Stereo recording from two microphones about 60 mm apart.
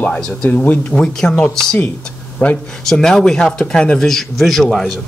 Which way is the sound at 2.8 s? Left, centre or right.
Centre.